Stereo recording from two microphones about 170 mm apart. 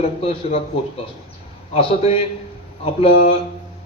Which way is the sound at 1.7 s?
35° left (ahead or behind).